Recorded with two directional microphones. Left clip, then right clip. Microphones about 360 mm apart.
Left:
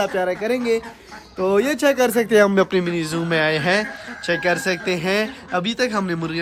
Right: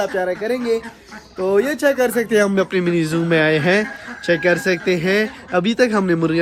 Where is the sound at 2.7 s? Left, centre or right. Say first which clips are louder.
Right 3 dB; centre.